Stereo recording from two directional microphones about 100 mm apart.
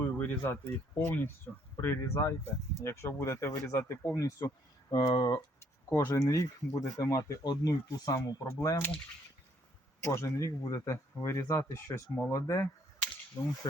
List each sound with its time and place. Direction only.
0.0 s speech: 20° left (ahead or behind); by 4.5 s 35° left (ahead or behind)
4.9 s speech: 45° left (ahead or behind)
5.5 s a sound: 25° left (ahead or behind)
6.1 s speech: 30° left (ahead or behind)
10.0 s speech: 30° left (ahead or behind)